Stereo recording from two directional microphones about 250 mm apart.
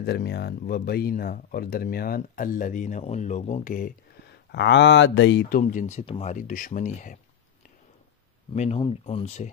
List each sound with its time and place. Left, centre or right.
0.0 s speech: left
5.6 s speech: left
8.5 s speech: left